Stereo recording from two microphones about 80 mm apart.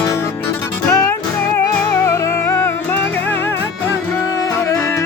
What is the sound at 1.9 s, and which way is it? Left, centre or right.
Music, left.